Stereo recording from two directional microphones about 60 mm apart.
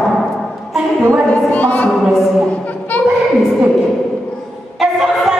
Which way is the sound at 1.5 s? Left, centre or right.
Left.